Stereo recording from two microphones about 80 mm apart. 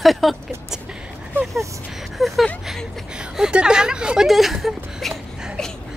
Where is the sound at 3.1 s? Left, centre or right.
Centre.